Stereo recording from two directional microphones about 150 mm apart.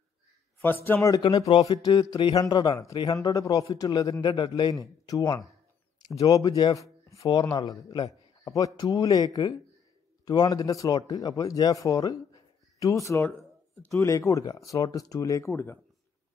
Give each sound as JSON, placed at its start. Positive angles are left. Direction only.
{"t": 0.8, "sound": "speech", "side_deg": 20}
{"t": 1.9, "sound": "a sound", "side_deg": 30}
{"t": 2.3, "sound": "speech", "side_deg": 25}